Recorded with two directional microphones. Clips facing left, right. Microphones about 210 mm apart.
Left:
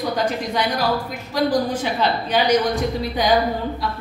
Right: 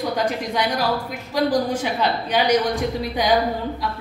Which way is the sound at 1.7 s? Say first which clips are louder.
Left 1 dB; 10° right (ahead or behind).